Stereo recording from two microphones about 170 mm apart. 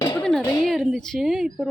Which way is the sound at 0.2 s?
5° left (ahead or behind).